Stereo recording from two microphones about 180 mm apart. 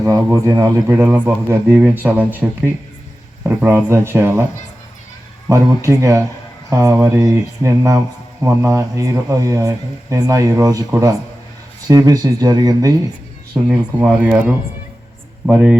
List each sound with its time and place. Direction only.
0.3 s speech: 15° right (ahead or behind)
5.5 s speech: 15° right (ahead or behind)
13.7 s speech: 5° right (ahead or behind)